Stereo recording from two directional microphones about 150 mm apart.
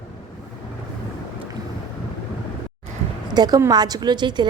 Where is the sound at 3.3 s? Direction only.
25° right (ahead or behind).